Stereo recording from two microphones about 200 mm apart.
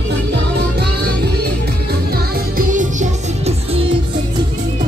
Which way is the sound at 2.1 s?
45° right (ahead or behind).